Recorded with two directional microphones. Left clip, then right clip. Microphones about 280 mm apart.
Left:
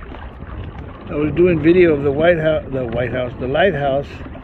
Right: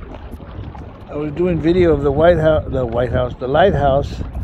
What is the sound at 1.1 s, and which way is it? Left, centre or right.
Speech, centre.